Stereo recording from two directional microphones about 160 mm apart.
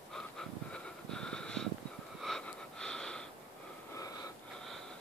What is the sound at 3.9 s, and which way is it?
Wheeze, 20° left (ahead or behind).